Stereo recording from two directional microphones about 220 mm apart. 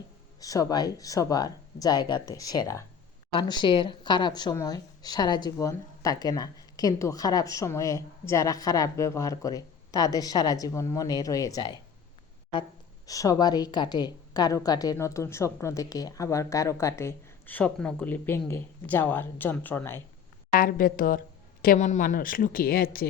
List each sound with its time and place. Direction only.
0.3 s a woman's voice: 15° left (ahead or behind)
13.1 s a woman's voice: 15° left (ahead or behind)
20.6 s speech: 40° left (ahead or behind)